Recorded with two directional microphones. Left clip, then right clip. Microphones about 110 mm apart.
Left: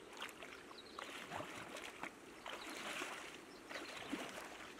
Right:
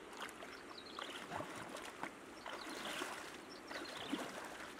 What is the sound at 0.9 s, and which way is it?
Boat, centre (ahead or behind).